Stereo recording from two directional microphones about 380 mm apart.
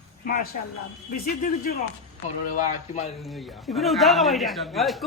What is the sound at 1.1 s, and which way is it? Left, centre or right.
A man's voice, left.